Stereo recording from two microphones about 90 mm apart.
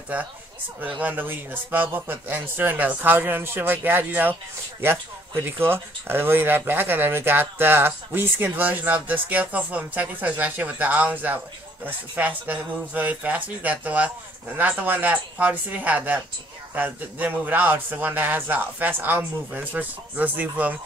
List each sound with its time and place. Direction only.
0.7 s speech: 20° right (ahead or behind)